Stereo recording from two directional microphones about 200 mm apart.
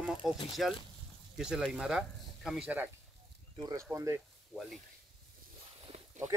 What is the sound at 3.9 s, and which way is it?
Speech, 15° right (ahead or behind).